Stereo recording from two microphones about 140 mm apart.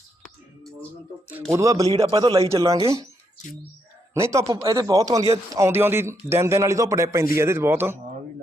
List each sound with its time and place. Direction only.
1.5 s a man's voice: 25° right (ahead or behind)
4.1 s a man's voice: 20° right (ahead or behind)